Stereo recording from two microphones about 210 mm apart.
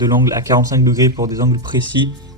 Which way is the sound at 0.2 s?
15° right (ahead or behind).